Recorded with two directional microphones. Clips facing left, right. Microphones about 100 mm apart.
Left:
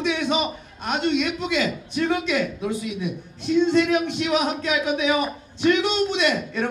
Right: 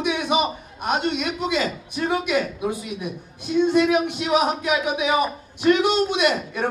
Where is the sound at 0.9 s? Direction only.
40° right (ahead or behind).